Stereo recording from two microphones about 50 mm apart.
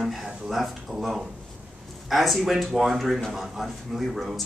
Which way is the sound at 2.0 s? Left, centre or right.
Centre.